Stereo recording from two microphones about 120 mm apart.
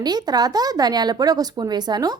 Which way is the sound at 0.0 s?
35° right (ahead or behind).